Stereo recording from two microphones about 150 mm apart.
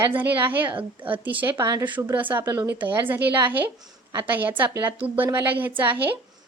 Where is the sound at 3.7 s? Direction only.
25° right (ahead or behind).